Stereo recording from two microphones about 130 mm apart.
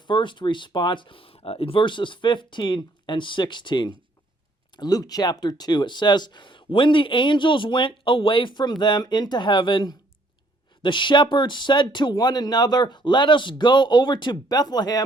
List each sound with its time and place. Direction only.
0.1 s speech: 40° left (ahead or behind)